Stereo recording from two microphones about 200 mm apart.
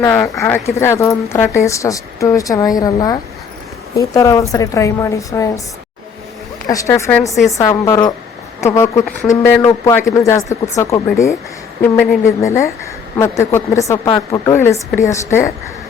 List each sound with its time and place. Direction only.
0.0 s a woman's voice: 10° left (ahead or behind)
6.7 s a woman's voice: 15° left (ahead or behind)